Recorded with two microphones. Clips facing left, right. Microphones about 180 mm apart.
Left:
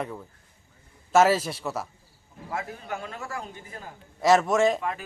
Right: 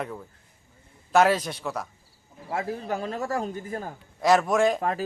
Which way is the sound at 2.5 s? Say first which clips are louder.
Right 5 dB; 30° right (ahead or behind).